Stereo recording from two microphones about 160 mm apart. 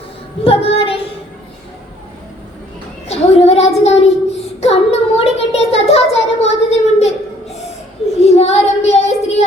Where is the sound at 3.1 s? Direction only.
40° left (ahead or behind).